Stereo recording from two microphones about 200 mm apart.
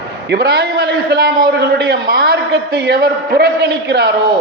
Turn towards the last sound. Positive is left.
turn(degrees=-55)  # may be behind; listen again after turning